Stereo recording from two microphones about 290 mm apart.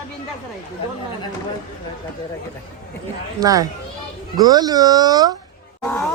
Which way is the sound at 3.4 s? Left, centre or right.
Centre.